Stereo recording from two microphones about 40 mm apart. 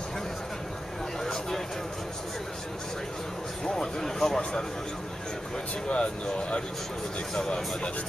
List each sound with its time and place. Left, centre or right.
1.2 s a sound: centre
3.6 s speech: centre
5.9 s speech: left